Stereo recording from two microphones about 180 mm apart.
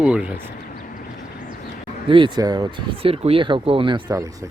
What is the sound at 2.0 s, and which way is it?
Speech, 25° right (ahead or behind).